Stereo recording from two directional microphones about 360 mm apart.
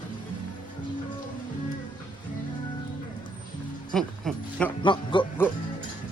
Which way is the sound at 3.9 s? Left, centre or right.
Centre.